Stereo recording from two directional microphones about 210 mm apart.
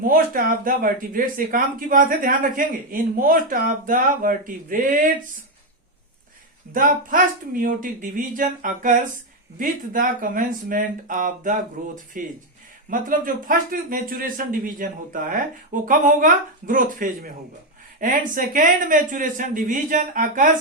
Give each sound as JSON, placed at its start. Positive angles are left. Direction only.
{"t": 0.0, "sound": "speech", "side_deg": -40}
{"t": 6.7, "sound": "speech", "side_deg": -40}